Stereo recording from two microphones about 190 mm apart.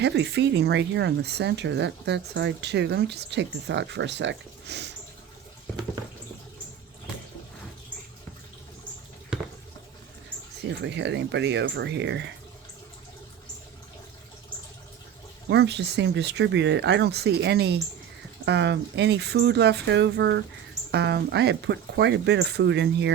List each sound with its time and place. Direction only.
0.0 s speech: 65° right (ahead or behind)
10.2 s speech: 65° right (ahead or behind)
15.4 s speech: 65° right (ahead or behind)